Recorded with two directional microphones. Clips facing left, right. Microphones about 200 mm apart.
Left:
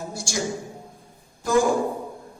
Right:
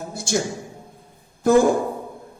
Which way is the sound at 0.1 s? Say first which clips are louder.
Right 4 dB; 55° right (ahead or behind).